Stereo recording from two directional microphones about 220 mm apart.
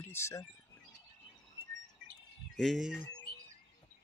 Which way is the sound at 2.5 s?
Centre (ahead or behind).